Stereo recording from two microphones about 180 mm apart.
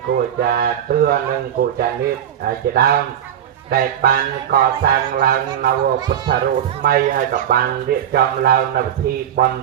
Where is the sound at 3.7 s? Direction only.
55° right (ahead or behind).